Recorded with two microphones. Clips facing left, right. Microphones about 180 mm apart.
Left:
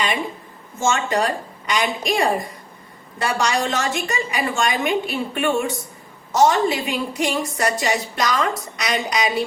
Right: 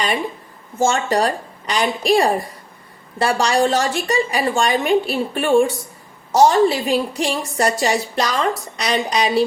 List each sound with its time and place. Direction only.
0.8 s a woman's voice: 35° right (ahead or behind)